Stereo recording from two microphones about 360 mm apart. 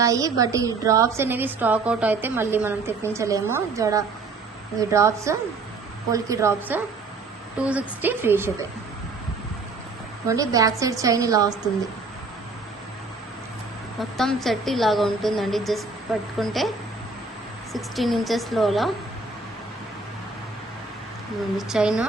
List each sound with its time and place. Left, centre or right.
0.0 s a woman's voice: centre
10.2 s a woman's voice: centre
14.0 s speech: centre
21.7 s speech: centre